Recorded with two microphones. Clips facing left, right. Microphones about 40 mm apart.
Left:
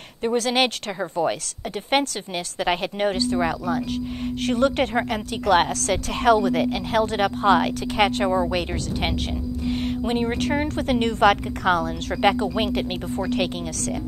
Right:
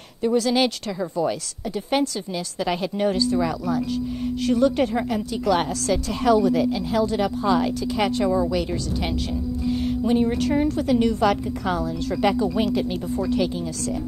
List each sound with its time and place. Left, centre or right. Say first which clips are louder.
0.2 s a woman's voice: right 1 dB; left